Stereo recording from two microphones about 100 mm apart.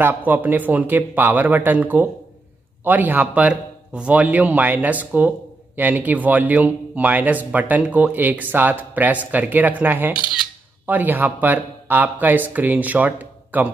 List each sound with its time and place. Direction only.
0.0 s a man's voice: 15° right (ahead or behind)